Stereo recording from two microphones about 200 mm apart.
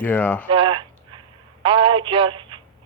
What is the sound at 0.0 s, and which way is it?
Speech, 10° left (ahead or behind).